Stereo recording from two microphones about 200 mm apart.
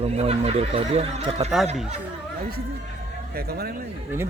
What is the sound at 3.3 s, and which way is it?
Speech, 50° right (ahead or behind).